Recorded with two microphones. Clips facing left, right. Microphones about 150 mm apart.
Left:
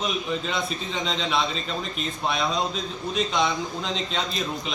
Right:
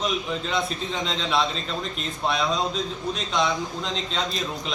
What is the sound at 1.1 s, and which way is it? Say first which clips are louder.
Speech: even; centre (ahead or behind).